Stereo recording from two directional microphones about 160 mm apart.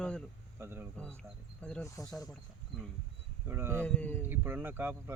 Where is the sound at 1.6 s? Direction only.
5° left (ahead or behind).